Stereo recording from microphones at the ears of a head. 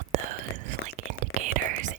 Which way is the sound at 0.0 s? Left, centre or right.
Right.